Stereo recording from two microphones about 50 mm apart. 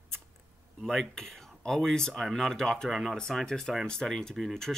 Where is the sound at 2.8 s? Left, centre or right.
Centre.